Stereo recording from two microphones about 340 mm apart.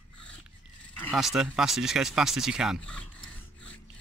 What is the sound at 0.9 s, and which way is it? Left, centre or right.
Speech, centre.